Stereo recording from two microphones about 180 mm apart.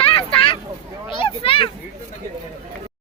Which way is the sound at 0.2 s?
30° left (ahead or behind).